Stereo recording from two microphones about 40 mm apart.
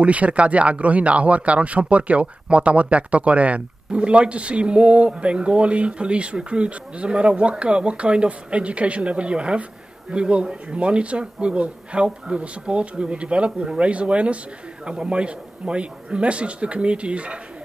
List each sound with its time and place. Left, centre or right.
0.0 s a man's voice: right